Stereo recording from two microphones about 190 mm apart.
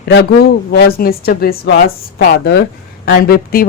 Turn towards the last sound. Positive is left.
turn(degrees=50)  # may be behind; listen again after turning